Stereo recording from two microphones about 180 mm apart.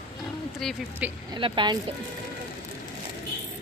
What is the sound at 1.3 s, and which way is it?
Speech, 25° right (ahead or behind).